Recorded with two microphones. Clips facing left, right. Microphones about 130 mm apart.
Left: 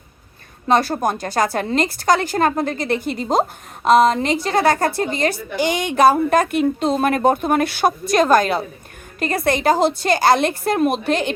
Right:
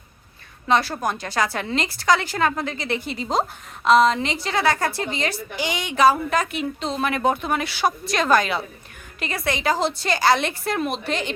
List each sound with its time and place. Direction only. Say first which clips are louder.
0.7 s a woman's voice: left 4 dB; 50° left (ahead or behind)